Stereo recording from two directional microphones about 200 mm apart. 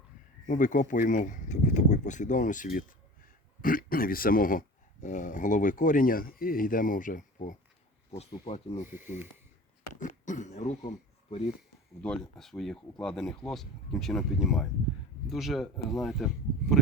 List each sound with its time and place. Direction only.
0.4 s speech: 40° left (ahead or behind)
12.0 s speech: 5° left (ahead or behind)